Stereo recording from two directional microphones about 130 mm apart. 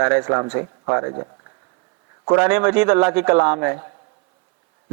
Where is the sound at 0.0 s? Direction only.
20° right (ahead or behind).